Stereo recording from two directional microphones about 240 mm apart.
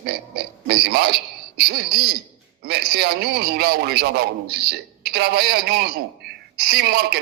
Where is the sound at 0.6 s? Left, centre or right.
Right.